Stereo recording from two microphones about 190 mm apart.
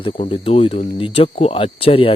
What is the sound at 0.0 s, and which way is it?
Speech, 30° left (ahead or behind).